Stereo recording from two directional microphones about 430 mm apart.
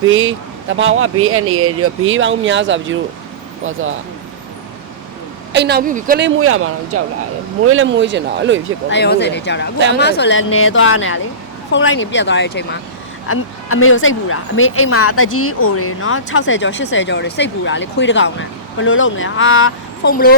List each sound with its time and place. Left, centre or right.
0.0 s speech: right
5.5 s speech: right
8.9 s speech: left
9.7 s speech: right
10.0 s speech: left